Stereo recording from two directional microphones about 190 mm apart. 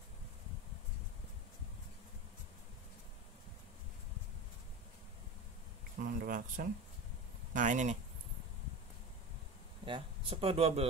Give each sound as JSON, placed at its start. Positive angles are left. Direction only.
{"t": 5.9, "sound": "a sound", "side_deg": -50}
{"t": 7.5, "sound": "speech", "side_deg": -40}
{"t": 9.8, "sound": "speech", "side_deg": -25}